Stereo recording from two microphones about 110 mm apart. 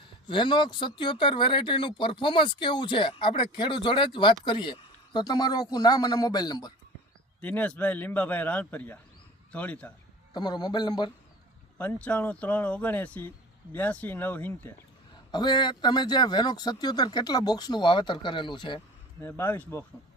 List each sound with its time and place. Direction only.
0.3 s speech: 45° left (ahead or behind)
7.4 s speech: 15° left (ahead or behind)
10.3 s speech: 40° left (ahead or behind)
11.9 s speech: 10° left (ahead or behind)
15.3 s speech: 40° left (ahead or behind)
19.2 s speech: 20° left (ahead or behind)